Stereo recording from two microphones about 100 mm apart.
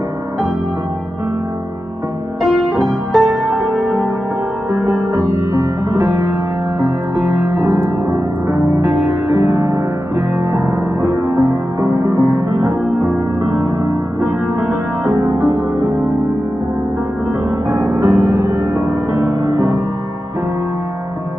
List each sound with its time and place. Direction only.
2.4 s music: centre (ahead or behind)
4.8 s music: 30° right (ahead or behind)
11.3 s music: 35° right (ahead or behind)
17.9 s music: 30° right (ahead or behind)